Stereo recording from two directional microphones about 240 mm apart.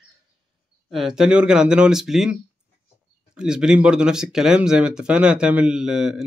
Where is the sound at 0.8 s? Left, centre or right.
Centre.